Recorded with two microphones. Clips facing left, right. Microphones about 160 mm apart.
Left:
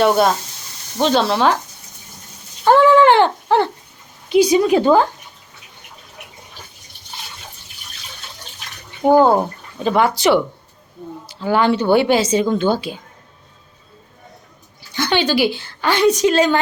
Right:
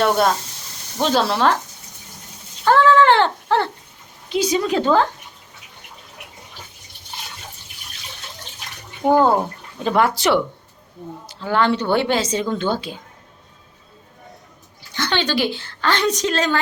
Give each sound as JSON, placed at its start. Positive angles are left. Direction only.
{"t": 0.0, "sound": "speech", "side_deg": 5}
{"t": 2.6, "sound": "a sound", "side_deg": 15}
{"t": 4.3, "sound": "a woman's voice", "side_deg": 10}
{"t": 9.0, "sound": "speech", "side_deg": 25}
{"t": 9.8, "sound": "a woman's voice", "side_deg": 0}
{"t": 14.9, "sound": "a woman's voice", "side_deg": 10}